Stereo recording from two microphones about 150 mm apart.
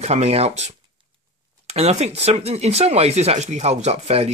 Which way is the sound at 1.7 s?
45° right (ahead or behind).